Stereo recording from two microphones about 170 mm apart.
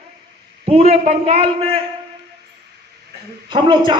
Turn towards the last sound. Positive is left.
turn(degrees=-30)  # may be behind; listen again after turning